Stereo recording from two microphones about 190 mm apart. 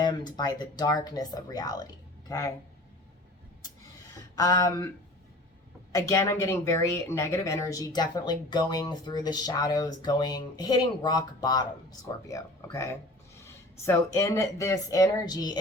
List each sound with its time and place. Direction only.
0.0 s speech: 20° left (ahead or behind)
4.4 s speech: 20° left (ahead or behind)
5.9 s speech: 15° left (ahead or behind)